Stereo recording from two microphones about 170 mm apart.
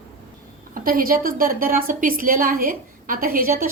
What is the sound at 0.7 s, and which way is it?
A woman's voice, 55° right (ahead or behind).